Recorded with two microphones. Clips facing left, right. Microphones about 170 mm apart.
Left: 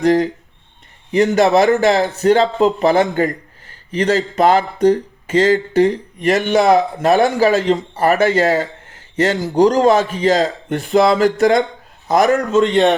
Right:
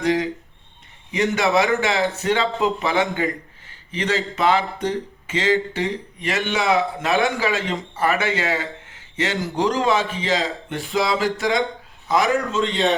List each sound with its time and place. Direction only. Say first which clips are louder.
0.0 s speech: left 7 dB; 40° left (ahead or behind)
10.8 s a man's voice: left 8 dB; 60° left (ahead or behind)